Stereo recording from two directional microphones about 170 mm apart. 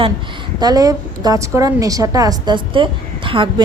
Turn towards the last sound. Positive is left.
turn(degrees=-30)  # may be behind; listen again after turning